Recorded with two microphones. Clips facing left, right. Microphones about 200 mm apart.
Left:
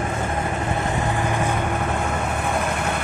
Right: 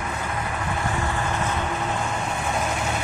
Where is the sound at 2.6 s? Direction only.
55° left (ahead or behind).